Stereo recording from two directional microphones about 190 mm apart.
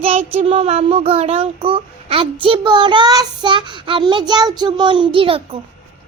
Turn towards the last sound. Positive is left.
turn(degrees=-30)  # may be behind; listen again after turning